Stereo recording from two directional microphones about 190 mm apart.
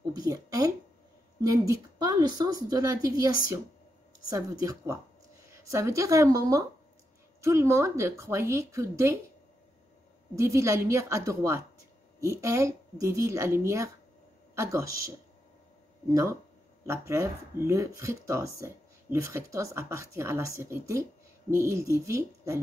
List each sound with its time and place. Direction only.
0.2 s a woman's voice: 20° right (ahead or behind)
10.3 s speech: 15° right (ahead or behind)